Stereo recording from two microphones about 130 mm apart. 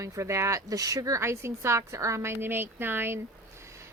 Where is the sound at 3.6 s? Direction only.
20° right (ahead or behind).